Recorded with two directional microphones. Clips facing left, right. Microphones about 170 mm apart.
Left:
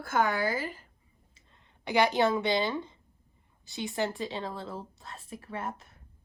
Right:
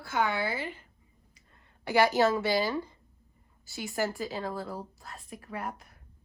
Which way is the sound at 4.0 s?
25° left (ahead or behind).